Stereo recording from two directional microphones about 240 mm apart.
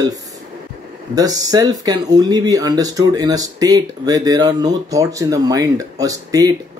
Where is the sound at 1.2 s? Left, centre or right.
Centre.